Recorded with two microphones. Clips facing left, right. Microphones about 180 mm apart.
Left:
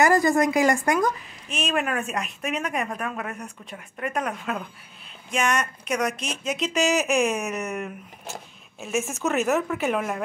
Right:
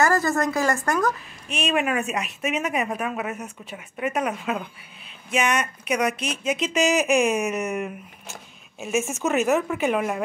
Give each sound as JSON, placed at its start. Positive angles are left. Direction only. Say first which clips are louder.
{"t": 0.0, "sound": "speech", "louder": "left 2 dB", "side_deg": 15}
{"t": 1.5, "sound": "speech", "louder": "right 2 dB", "side_deg": 0}